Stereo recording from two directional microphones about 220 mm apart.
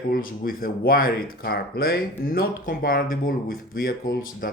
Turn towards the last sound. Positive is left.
turn(degrees=40)  # may be behind; listen again after turning